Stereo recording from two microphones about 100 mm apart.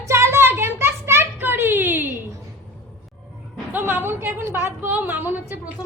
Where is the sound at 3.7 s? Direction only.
20° right (ahead or behind).